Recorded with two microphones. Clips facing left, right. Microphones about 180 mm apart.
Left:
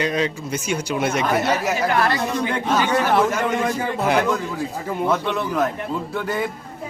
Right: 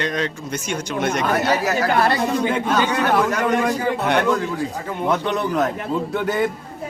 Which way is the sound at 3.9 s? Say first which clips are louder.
Left 2 dB; centre (ahead or behind).